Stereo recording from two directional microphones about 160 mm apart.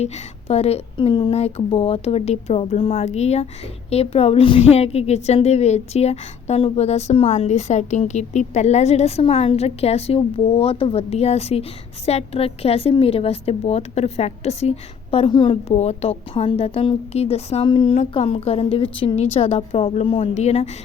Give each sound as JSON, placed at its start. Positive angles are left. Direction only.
{"t": 0.0, "sound": "a woman's voice", "side_deg": 40}